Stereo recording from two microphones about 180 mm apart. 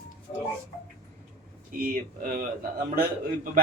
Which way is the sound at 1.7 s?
50° right (ahead or behind).